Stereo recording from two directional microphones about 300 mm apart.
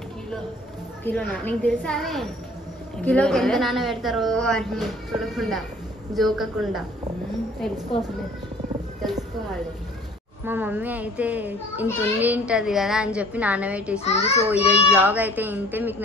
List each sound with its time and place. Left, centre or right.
1.0 s a child's voice: centre
10.4 s a child's voice: centre
14.0 s a child's voice: left
14.5 s a child's voice: centre